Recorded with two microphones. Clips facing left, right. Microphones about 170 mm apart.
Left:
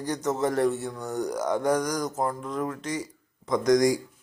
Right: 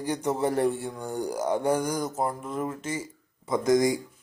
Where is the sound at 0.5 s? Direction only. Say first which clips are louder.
Left 2 dB; 30° right (ahead or behind).